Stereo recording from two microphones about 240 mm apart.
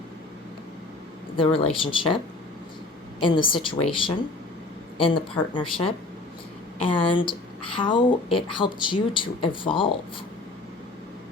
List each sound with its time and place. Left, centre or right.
1.4 s speech: left
4.9 s speech: left